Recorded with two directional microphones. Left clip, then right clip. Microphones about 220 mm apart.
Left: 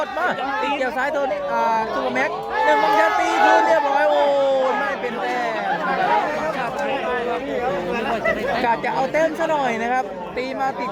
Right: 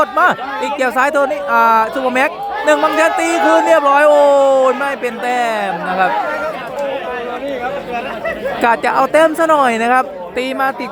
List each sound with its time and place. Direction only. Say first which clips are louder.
0.0 s speech: right 9 dB; 40° right (ahead or behind)
8.6 s speech: right 11 dB; 45° right (ahead or behind)